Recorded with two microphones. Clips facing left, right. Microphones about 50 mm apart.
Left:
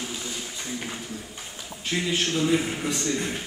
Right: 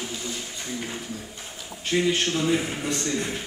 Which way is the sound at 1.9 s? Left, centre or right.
Centre.